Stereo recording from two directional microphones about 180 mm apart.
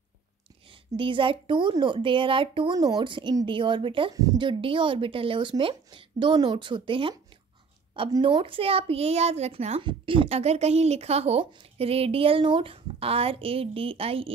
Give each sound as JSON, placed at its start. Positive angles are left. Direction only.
{"t": 0.9, "sound": "a woman's voice", "side_deg": -30}